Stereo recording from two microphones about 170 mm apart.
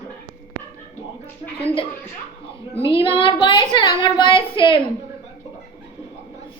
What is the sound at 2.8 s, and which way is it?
A woman's voice, 30° left (ahead or behind).